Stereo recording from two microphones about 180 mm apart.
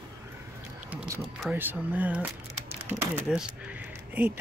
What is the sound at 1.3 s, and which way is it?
Speech, 10° right (ahead or behind).